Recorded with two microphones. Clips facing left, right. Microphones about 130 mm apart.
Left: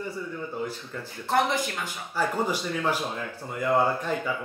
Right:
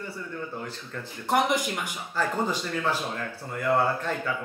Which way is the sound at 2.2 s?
10° left (ahead or behind).